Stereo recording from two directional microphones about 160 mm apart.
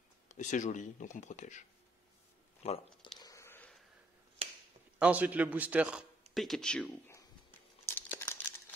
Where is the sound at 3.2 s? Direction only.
20° left (ahead or behind).